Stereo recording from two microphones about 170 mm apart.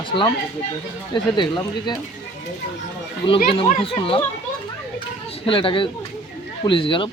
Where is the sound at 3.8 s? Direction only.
30° left (ahead or behind).